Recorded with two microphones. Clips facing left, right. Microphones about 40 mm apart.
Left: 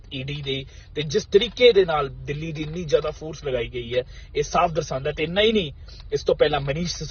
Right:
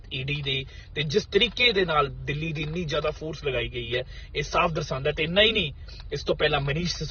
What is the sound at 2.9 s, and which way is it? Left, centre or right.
Speech, centre.